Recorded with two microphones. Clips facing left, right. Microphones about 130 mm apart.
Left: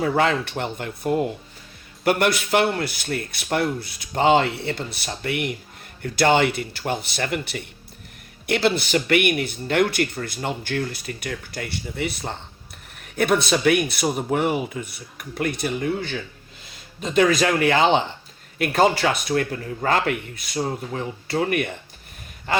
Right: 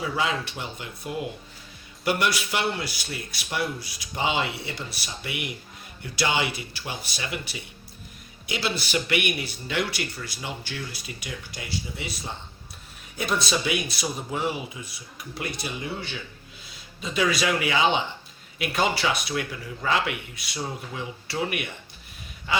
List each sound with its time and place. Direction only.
0.0 s speech: 55° left (ahead or behind)